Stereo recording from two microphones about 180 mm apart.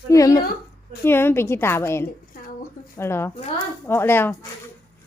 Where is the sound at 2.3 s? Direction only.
50° left (ahead or behind).